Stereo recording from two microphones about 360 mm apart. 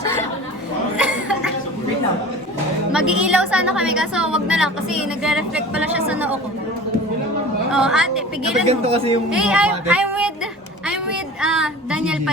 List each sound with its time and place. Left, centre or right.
0.9 s chuckle: centre
2.9 s a woman's voice: centre
7.7 s a woman's voice: centre
8.6 s speech: centre
9.3 s a woman's voice: centre
10.8 s a sound: centre